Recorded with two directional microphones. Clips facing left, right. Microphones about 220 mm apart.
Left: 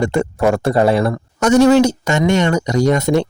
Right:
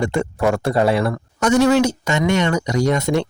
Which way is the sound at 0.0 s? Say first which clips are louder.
Left 3 dB; 40° left (ahead or behind).